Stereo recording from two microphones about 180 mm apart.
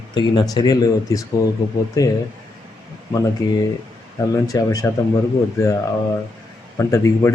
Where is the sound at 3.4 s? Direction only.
20° left (ahead or behind).